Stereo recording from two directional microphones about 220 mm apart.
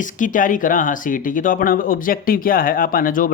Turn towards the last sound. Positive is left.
turn(degrees=40)  # may be behind; listen again after turning